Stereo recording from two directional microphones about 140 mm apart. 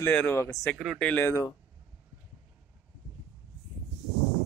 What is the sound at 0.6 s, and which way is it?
Speech, 5° left (ahead or behind).